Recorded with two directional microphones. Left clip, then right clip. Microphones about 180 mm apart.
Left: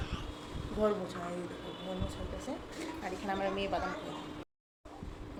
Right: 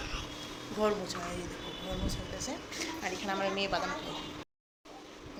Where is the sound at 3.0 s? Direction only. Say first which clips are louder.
Right 1 dB; 5° left (ahead or behind).